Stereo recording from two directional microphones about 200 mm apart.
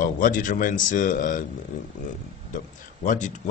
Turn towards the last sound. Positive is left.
turn(degrees=40)  # may be behind; listen again after turning